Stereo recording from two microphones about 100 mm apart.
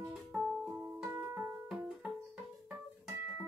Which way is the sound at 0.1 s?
5° right (ahead or behind).